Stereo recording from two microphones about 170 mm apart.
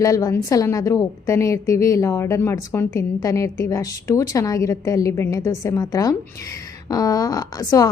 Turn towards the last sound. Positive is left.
turn(degrees=20)  # may be behind; listen again after turning